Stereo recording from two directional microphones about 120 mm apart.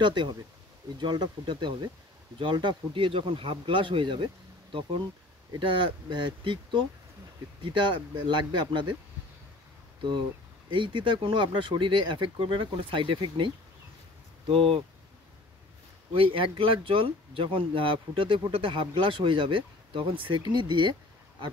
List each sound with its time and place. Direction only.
0.0 s speech: 40° right (ahead or behind)
6.0 s speech: 40° right (ahead or behind)
10.7 s speech: 45° right (ahead or behind)
14.5 s speech: 45° right (ahead or behind)
16.1 s speech: 50° right (ahead or behind)